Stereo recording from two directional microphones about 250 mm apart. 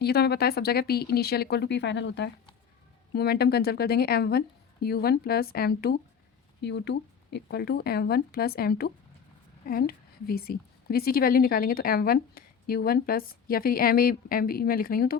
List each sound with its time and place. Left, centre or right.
0.0 s a woman's voice: left